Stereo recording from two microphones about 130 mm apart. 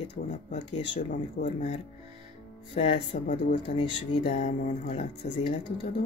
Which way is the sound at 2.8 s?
50° left (ahead or behind).